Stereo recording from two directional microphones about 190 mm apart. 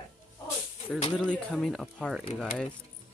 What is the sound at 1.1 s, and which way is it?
Speech, 5° left (ahead or behind).